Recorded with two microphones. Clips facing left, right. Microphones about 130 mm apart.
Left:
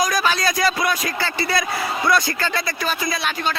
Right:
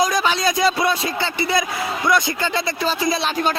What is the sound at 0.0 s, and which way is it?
A man's voice, 20° right (ahead or behind).